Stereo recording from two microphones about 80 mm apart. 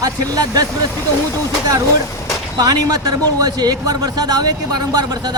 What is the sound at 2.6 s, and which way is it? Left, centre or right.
A man's voice, right.